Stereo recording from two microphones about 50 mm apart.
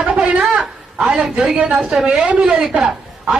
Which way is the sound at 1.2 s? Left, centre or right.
Centre.